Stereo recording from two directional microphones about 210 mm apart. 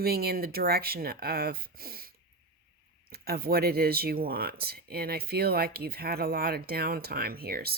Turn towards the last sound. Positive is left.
turn(degrees=-45)  # may be behind; listen again after turning